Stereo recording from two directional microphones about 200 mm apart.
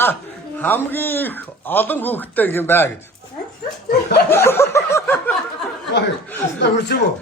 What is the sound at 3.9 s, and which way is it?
Chuckle, 55° left (ahead or behind).